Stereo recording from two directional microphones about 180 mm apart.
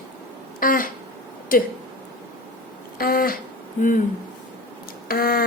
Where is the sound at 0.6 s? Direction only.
50° left (ahead or behind).